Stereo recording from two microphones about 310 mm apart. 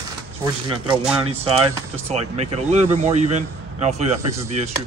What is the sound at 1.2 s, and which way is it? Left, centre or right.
A man's voice, centre.